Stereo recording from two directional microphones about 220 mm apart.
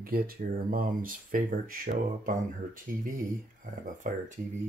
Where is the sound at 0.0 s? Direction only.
40° right (ahead or behind).